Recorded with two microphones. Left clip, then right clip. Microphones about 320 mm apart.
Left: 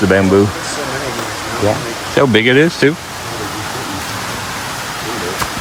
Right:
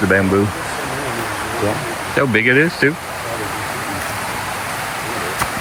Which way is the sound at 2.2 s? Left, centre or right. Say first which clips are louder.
Left 4 dB; centre.